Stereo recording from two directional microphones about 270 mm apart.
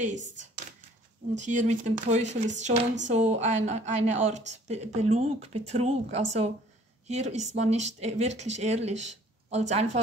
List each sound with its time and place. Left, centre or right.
1.4 s speech: right